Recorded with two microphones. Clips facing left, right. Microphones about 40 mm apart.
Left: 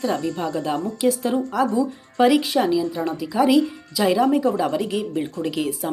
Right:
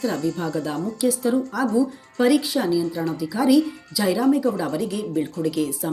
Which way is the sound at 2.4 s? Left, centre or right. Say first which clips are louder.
Left 3 dB; left.